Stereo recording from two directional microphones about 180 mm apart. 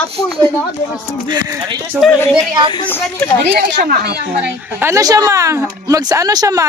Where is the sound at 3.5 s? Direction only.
65° right (ahead or behind).